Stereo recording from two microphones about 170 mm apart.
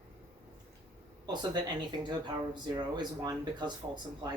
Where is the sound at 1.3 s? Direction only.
25° right (ahead or behind).